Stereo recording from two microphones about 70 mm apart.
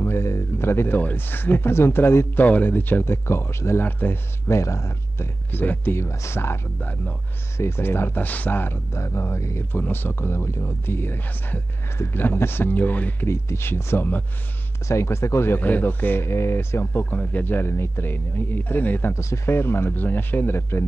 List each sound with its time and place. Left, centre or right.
0.0 s speech: left
4.5 s speech: left
5.9 s speech: left
6.8 s a man's voice: left
7.5 s speech: left
8.9 s speech: left
9.7 s a man's voice: left
13.3 s speech: left
14.9 s speech: left
15.6 s speech: left
17.0 s a man's voice: left
19.1 s speech: left